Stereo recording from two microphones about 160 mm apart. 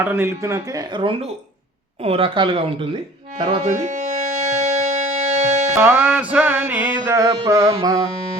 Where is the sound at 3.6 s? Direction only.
50° right (ahead or behind).